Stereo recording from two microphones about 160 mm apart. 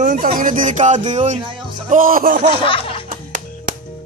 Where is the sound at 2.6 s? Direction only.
35° left (ahead or behind).